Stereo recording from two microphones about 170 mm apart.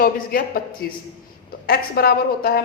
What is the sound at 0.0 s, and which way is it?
Speech, 60° left (ahead or behind).